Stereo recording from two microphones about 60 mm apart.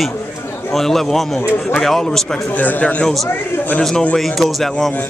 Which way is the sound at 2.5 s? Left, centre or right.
Left.